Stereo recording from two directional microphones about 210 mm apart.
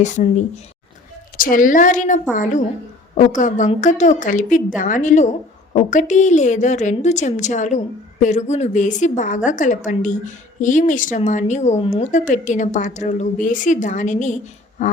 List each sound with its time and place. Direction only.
0.0 s a woman's voice: 35° left (ahead or behind)